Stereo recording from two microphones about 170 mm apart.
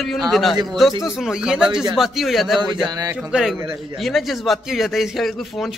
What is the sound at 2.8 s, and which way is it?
Speech, 25° right (ahead or behind).